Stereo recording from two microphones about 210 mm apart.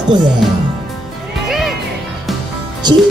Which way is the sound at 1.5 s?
Centre (ahead or behind).